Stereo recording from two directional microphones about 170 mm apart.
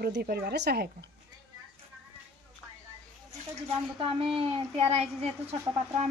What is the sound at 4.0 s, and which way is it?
Speech, 35° right (ahead or behind).